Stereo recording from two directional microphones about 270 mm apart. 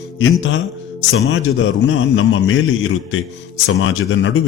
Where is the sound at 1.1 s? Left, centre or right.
Left.